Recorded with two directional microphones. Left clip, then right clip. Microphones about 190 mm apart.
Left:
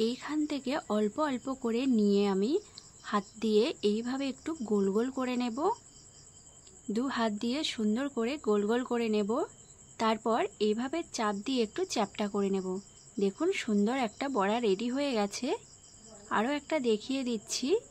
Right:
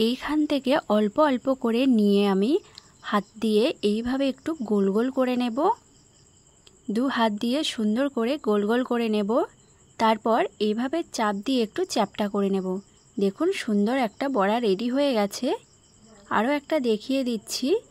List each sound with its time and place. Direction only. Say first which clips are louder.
0.0 s speech: right 7 dB; 45° right (ahead or behind)
6.9 s speech: right 8 dB; 40° right (ahead or behind)